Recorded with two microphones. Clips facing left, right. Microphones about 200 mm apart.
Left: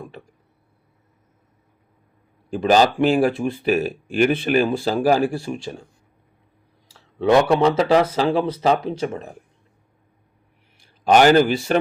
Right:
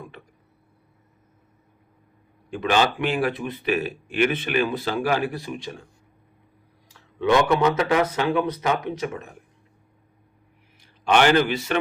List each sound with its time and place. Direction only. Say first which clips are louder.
2.5 s speech: left 5 dB; 35° left (ahead or behind)
7.2 s speech: left 3 dB; 30° left (ahead or behind)
11.0 s speech: left 5 dB; 40° left (ahead or behind)